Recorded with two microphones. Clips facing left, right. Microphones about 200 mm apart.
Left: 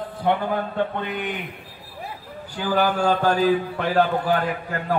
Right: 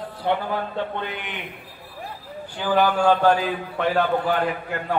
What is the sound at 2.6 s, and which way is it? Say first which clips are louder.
A man's voice: right 1 dB; 40° left (ahead or behind).